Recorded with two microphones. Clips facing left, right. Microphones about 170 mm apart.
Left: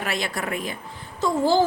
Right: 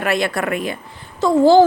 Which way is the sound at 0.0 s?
60° right (ahead or behind).